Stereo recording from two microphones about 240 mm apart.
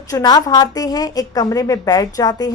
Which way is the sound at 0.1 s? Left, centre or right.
Centre.